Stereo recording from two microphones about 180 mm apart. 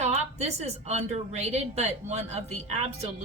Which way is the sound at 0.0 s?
40° right (ahead or behind).